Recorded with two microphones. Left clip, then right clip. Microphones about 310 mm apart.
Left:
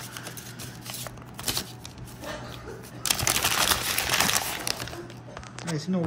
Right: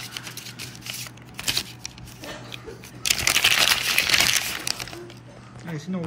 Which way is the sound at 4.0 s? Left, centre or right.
Centre.